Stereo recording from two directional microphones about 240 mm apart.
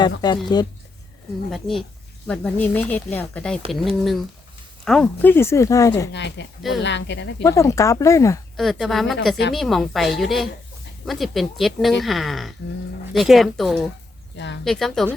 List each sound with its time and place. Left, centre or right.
0.4 s speech: centre
1.5 s speech: centre
6.1 s speech: left
6.6 s speech: centre
6.8 s speech: left
7.4 s speech: centre
8.5 s speech: centre
14.3 s speech: left
14.6 s speech: centre